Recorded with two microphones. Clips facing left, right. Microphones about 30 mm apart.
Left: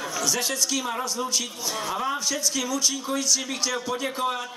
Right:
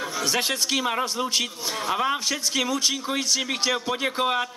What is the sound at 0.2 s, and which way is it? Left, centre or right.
A man's voice, right.